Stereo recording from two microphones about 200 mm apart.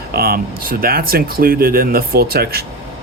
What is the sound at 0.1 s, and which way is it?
Speech, 50° right (ahead or behind).